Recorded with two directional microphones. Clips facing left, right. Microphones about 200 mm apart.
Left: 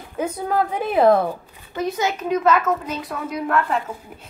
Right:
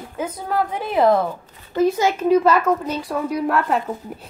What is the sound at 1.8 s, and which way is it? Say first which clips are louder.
A woman's voice: right 6 dB; 30° right (ahead or behind).